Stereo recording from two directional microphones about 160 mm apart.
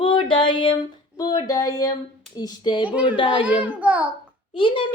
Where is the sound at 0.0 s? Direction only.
30° left (ahead or behind).